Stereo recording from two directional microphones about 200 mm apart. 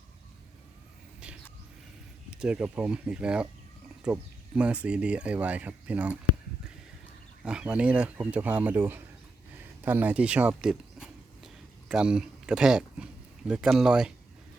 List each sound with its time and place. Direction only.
2.4 s speech: 5° right (ahead or behind)
7.4 s speech: 5° right (ahead or behind)
9.6 s a sound: 10° right (ahead or behind)
13.5 s speech: 5° right (ahead or behind)